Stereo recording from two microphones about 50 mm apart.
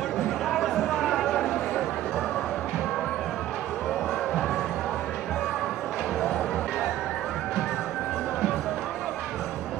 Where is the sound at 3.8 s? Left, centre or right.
Centre.